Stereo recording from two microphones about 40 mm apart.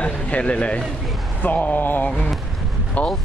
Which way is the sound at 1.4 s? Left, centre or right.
Left.